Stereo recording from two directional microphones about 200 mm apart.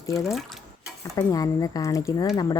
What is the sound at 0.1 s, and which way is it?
Speech, centre (ahead or behind).